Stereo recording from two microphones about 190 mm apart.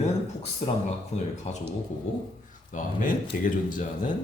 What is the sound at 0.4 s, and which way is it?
Speech, 35° left (ahead or behind).